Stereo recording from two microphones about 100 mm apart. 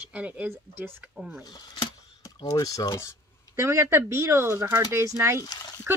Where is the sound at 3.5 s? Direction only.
30° right (ahead or behind).